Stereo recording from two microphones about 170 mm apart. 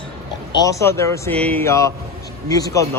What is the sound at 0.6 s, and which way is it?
A man's voice, 15° left (ahead or behind).